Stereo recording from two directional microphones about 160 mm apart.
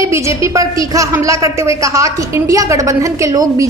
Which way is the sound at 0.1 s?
20° right (ahead or behind).